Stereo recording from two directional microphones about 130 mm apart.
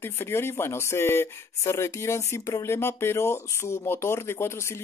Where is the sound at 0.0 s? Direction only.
20° left (ahead or behind).